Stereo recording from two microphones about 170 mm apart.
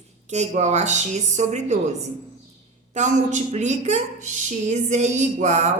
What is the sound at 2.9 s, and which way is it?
A woman's voice, 45° right (ahead or behind).